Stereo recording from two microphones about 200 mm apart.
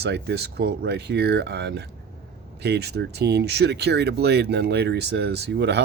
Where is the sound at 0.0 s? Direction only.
55° right (ahead or behind).